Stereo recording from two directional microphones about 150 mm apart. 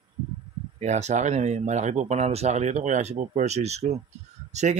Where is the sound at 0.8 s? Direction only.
50° right (ahead or behind).